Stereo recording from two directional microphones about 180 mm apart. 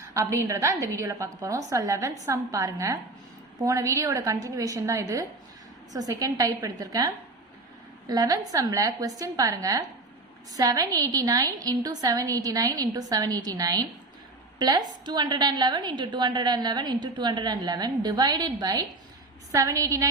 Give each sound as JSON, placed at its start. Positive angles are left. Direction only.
{"t": 0.0, "sound": "a woman's voice", "side_deg": -15}